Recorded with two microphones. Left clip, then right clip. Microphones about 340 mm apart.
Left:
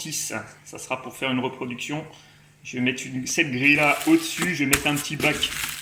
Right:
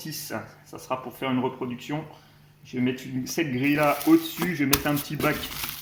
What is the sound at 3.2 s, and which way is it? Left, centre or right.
Speech, centre.